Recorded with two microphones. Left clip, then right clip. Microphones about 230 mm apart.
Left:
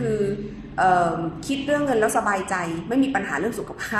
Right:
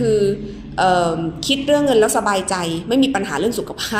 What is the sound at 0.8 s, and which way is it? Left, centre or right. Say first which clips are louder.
A woman's voice: right 3 dB; right.